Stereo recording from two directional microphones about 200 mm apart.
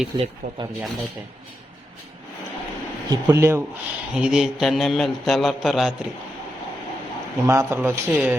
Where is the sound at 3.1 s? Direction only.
15° right (ahead or behind).